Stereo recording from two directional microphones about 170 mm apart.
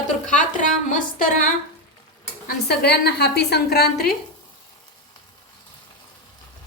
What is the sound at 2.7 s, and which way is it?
A woman's voice, 70° left (ahead or behind).